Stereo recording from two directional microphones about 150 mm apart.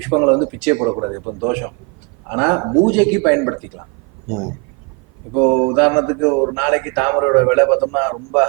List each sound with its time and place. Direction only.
0.0 s speech: 15° right (ahead or behind)